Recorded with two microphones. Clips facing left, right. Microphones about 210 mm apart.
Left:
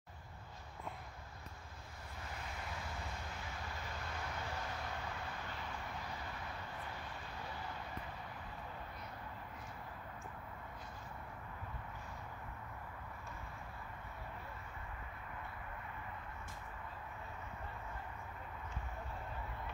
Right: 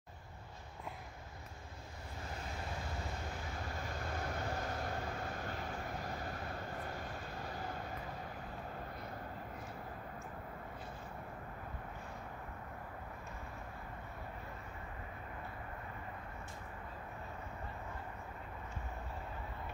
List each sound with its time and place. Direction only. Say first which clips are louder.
4.0 s vehicle: right 5 dB; 45° right (ahead or behind)